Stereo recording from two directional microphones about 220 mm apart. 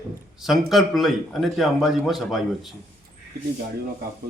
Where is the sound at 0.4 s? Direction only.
Centre (ahead or behind).